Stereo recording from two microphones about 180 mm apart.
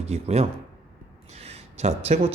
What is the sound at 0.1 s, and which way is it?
A man's voice, 35° right (ahead or behind).